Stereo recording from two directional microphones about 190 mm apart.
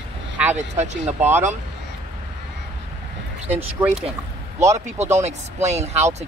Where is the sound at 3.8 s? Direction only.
15° right (ahead or behind).